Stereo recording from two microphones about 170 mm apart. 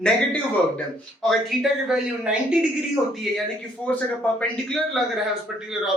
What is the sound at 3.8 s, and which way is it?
A man's voice, 10° left (ahead or behind).